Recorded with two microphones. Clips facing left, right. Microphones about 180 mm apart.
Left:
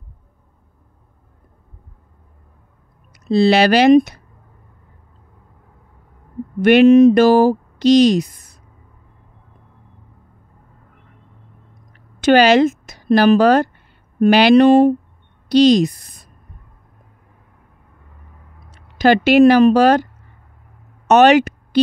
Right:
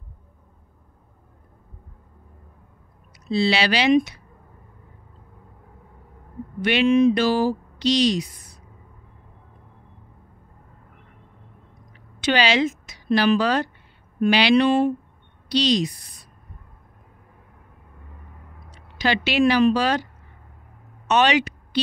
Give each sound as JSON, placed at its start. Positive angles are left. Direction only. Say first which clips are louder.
{"t": 3.3, "sound": "speech", "louder": "left 8 dB", "side_deg": 45}
{"t": 6.6, "sound": "speech", "louder": "left 9 dB", "side_deg": 50}
{"t": 11.9, "sound": "a woman's voice", "louder": "left 10 dB", "side_deg": 50}
{"t": 18.9, "sound": "speech", "louder": "left 10 dB", "side_deg": 50}
{"t": 21.1, "sound": "speech", "louder": "left 9 dB", "side_deg": 50}